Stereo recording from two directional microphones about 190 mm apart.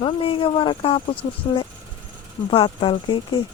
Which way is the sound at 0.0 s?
25° left (ahead or behind).